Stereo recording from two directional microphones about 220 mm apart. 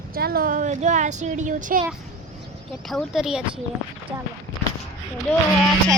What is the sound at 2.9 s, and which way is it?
Speech, centre (ahead or behind).